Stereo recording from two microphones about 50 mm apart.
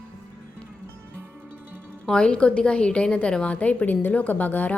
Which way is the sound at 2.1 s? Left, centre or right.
Left.